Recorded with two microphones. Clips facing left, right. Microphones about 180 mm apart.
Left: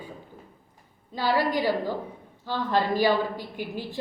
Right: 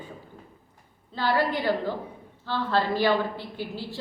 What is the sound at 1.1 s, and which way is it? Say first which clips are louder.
A woman's voice: even; 10° left (ahead or behind).